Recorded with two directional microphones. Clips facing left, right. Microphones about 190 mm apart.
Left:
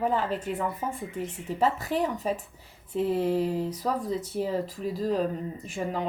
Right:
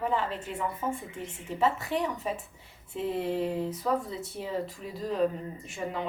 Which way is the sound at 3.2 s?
40° left (ahead or behind).